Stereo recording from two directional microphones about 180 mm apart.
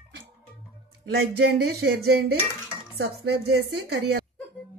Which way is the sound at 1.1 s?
65° right (ahead or behind).